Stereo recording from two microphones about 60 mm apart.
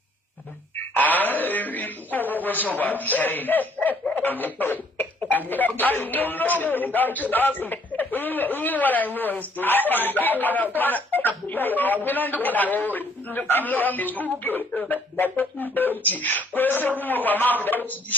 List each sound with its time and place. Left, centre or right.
0.9 s a man's voice: left